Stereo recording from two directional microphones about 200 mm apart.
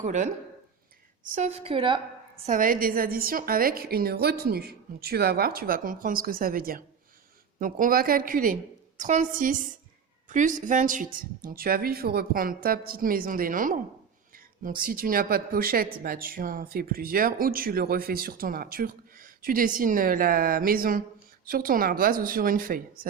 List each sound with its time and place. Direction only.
0.0 s a woman's voice: 35° right (ahead or behind)
1.4 s a woman's voice: 30° right (ahead or behind)
2.5 s a woman's voice: 45° right (ahead or behind)